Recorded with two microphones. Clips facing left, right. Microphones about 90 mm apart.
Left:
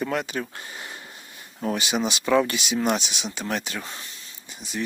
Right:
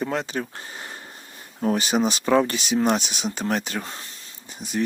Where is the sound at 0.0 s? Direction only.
30° right (ahead or behind).